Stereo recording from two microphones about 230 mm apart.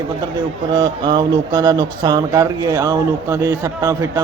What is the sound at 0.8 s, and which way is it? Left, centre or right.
Speech, centre.